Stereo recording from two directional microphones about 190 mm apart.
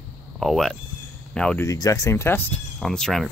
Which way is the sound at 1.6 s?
20° left (ahead or behind).